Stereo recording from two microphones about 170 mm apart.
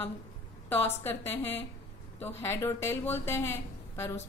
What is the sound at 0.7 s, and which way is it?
Speech, 10° left (ahead or behind).